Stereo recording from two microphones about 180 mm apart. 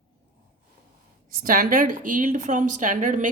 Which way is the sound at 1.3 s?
50° right (ahead or behind).